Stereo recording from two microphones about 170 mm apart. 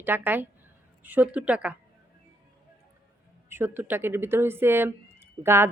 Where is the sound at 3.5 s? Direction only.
15° right (ahead or behind).